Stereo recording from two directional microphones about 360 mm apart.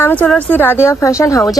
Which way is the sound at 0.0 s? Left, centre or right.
Centre.